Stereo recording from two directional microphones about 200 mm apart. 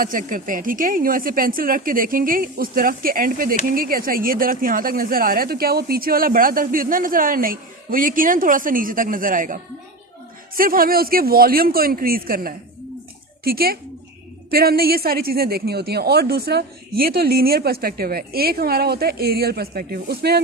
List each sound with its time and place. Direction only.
0.0 s a woman's voice: 40° right (ahead or behind)